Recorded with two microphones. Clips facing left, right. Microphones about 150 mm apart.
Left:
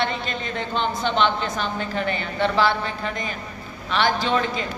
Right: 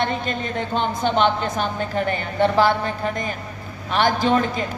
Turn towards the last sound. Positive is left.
turn(degrees=-50)  # may be behind; listen again after turning